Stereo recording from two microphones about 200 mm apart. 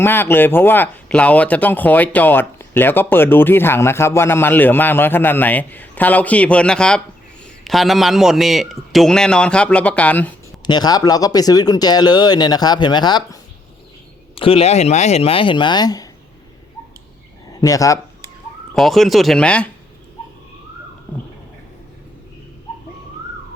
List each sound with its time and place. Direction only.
0.0 s a man's voice: 10° left (ahead or behind)
10.7 s speech: 20° left (ahead or behind)
17.6 s speech: 15° left (ahead or behind)
18.7 s a man's voice: centre (ahead or behind)